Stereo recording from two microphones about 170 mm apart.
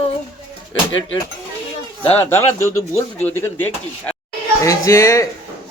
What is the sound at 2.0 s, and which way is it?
Speech, 40° left (ahead or behind).